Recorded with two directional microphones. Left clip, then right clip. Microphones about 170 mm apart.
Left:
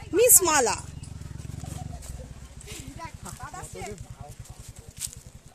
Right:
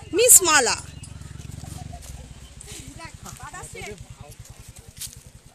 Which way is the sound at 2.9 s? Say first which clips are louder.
Even; 35° left (ahead or behind).